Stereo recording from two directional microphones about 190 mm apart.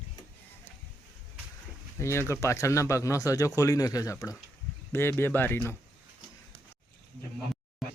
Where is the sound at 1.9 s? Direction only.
15° left (ahead or behind).